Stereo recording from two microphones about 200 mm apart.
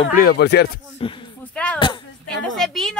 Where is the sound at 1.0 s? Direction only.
25° left (ahead or behind).